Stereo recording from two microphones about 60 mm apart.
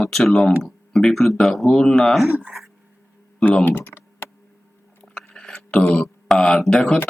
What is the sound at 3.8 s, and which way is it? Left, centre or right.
Computer keyboard, left.